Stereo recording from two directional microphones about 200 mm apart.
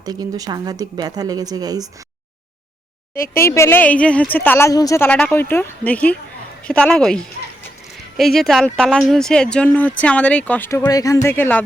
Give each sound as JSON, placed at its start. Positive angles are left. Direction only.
{"t": 0.0, "sound": "speech", "side_deg": -20}
{"t": 3.3, "sound": "a woman's voice", "side_deg": 15}